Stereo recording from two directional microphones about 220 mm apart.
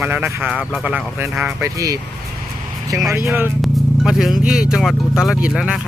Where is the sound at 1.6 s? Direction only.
15° right (ahead or behind).